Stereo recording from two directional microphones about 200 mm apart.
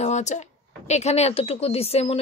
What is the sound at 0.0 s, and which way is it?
Speech, 35° left (ahead or behind).